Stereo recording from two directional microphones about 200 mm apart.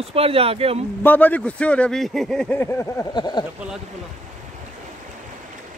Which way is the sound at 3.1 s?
20° left (ahead or behind).